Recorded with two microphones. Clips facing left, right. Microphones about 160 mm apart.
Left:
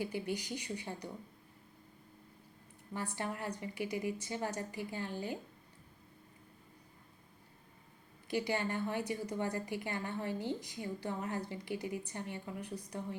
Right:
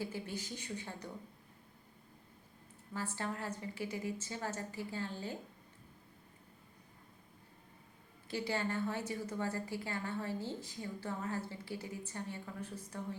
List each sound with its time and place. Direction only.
0.0 s a woman's voice: 15° left (ahead or behind)
2.9 s a woman's voice: 15° left (ahead or behind)
8.3 s a woman's voice: 15° left (ahead or behind)